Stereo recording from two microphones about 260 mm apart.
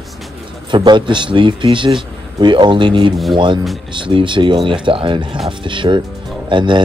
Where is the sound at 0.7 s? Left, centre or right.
Centre.